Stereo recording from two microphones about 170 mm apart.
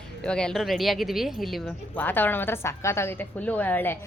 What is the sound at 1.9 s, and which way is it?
A woman's voice, 10° left (ahead or behind).